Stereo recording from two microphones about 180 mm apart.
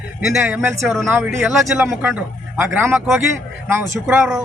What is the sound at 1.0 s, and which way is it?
A man's voice, 10° right (ahead or behind).